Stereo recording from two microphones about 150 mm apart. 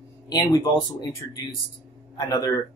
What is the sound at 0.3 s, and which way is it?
Speech, 25° left (ahead or behind).